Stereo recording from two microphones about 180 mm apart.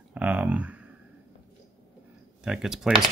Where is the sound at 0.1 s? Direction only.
10° right (ahead or behind).